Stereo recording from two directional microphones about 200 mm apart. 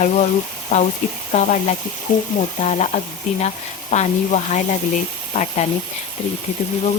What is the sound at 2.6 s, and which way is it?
Speech, 35° left (ahead or behind).